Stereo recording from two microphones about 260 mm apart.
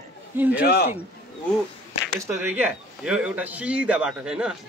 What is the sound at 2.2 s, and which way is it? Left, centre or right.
Speech, centre.